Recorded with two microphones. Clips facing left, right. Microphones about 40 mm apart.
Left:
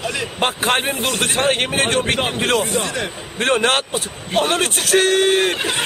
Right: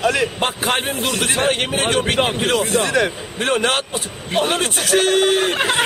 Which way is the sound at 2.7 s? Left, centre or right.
Right.